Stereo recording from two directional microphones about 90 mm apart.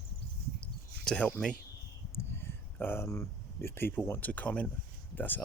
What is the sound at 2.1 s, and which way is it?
Speech, 25° left (ahead or behind).